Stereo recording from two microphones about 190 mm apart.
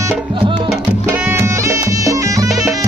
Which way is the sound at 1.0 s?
10° right (ahead or behind).